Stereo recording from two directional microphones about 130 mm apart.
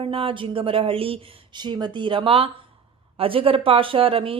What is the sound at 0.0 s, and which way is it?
A woman's voice, 45° right (ahead or behind).